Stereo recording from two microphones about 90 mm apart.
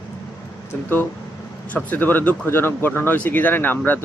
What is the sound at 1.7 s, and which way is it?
Speech, 20° left (ahead or behind).